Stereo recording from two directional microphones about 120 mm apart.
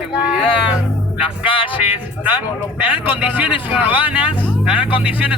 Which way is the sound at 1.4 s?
45° left (ahead or behind).